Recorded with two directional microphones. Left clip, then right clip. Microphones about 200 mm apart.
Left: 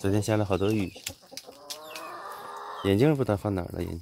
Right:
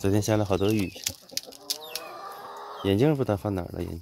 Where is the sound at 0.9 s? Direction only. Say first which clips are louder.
Right 6 dB; 60° right (ahead or behind).